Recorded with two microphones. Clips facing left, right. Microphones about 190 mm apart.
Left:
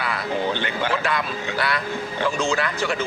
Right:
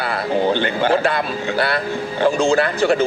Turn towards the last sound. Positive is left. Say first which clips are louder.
# right 8 dB
turn(degrees=-30)  # may be behind; listen again after turning